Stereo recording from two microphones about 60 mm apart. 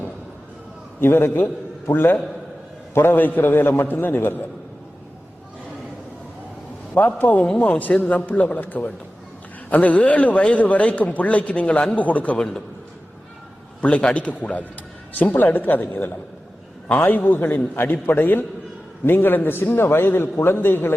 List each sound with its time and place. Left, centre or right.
0.9 s a man's voice: left
7.2 s a man's voice: left
12.4 s a man's voice: centre
13.8 s a man's voice: left